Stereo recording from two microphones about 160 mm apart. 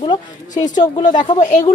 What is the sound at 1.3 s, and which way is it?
Speech, 50° left (ahead or behind).